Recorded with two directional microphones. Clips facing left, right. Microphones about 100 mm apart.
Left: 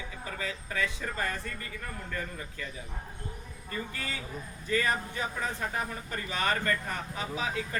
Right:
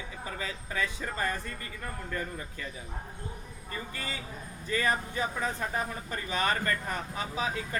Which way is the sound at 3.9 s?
30° right (ahead or behind).